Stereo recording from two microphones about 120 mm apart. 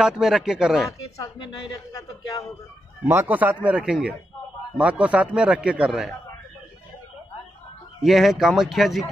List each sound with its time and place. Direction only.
0.0 s speech: 5° right (ahead or behind)
0.9 s speech: 30° left (ahead or behind)
3.1 s speech: 20° right (ahead or behind)
8.0 s speech: centre (ahead or behind)